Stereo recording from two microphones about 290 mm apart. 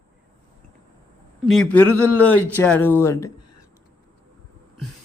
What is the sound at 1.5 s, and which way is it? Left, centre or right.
Speech, centre.